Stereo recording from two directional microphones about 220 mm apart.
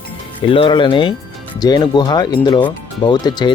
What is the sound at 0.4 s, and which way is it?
Speech, 25° left (ahead or behind).